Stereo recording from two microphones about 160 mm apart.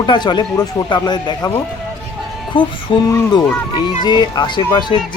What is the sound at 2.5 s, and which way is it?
Speech, 30° left (ahead or behind).